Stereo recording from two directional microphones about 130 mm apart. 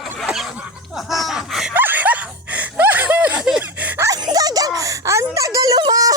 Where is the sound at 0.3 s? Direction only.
5° right (ahead or behind).